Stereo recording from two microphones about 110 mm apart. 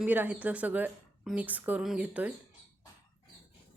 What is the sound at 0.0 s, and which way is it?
Speech, 15° right (ahead or behind).